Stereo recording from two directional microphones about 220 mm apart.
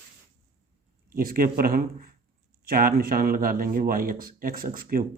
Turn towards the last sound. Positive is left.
turn(degrees=-40)  # may be behind; listen again after turning